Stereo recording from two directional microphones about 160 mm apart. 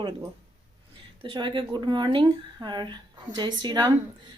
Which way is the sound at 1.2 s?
30° right (ahead or behind).